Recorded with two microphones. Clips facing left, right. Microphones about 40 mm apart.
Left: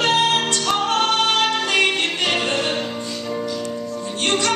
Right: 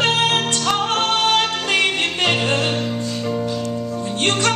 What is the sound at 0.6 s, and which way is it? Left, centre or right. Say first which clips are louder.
Music: even; right.